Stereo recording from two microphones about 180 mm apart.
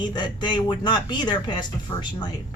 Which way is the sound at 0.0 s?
25° left (ahead or behind).